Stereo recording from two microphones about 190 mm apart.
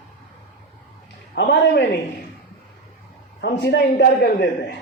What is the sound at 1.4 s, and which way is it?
Speech, 60° left (ahead or behind).